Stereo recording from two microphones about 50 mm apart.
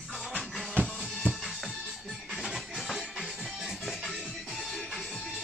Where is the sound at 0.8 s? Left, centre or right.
Right.